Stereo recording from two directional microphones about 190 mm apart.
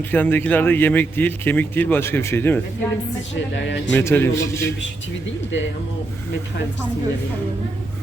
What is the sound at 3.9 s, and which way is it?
Speech, 10° left (ahead or behind).